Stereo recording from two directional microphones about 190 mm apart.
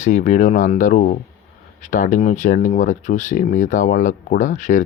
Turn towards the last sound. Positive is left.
turn(degrees=40)  # may be behind; listen again after turning